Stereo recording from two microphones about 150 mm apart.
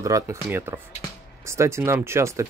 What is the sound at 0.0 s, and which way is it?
Speech, 20° right (ahead or behind).